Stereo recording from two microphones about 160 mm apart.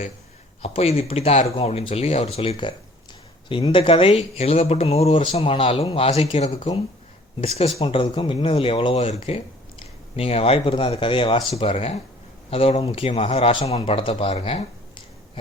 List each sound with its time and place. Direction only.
0.6 s speech: 40° left (ahead or behind)